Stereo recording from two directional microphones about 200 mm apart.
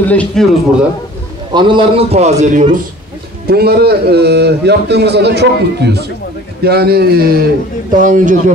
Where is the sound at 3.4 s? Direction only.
50° right (ahead or behind).